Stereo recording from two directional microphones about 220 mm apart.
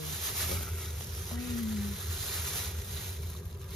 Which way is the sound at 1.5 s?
Centre (ahead or behind).